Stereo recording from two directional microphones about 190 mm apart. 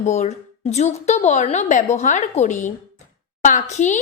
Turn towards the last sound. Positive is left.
turn(degrees=40)  # may be behind; listen again after turning